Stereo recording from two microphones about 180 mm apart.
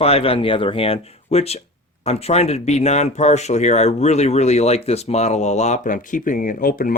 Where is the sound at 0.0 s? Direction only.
30° left (ahead or behind).